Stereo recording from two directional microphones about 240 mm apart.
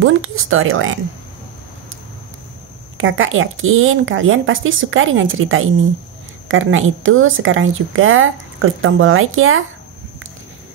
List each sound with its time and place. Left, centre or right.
0.0 s speech: right
3.0 s speech: right